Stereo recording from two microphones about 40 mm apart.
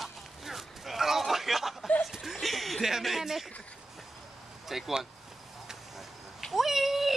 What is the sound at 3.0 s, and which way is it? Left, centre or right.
Speech, centre.